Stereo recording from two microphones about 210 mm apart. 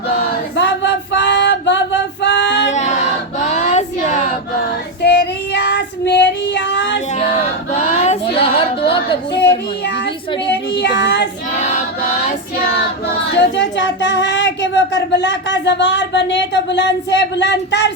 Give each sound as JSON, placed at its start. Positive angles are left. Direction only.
{"t": 0.5, "sound": "music", "side_deg": 55}
{"t": 2.7, "sound": "female singing", "side_deg": 35}
{"t": 5.0, "sound": "child singing", "side_deg": 55}
{"t": 7.1, "sound": "female singing", "side_deg": 35}
{"t": 9.8, "sound": "child singing", "side_deg": 55}
{"t": 13.3, "sound": "speech", "side_deg": 55}